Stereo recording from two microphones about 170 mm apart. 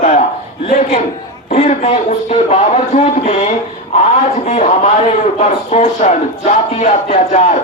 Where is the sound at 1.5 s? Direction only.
40° left (ahead or behind).